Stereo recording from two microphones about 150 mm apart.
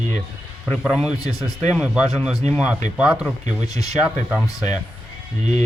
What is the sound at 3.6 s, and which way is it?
Speech, 25° left (ahead or behind).